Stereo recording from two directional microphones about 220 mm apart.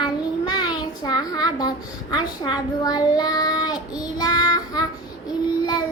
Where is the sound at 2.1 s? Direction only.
20° left (ahead or behind).